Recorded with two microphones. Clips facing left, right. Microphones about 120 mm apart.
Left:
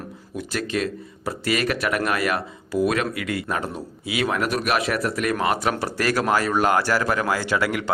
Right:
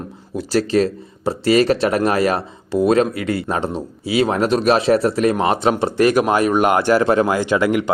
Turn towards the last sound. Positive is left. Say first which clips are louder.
# right 6 dB
turn(degrees=-20)  # may be behind; listen again after turning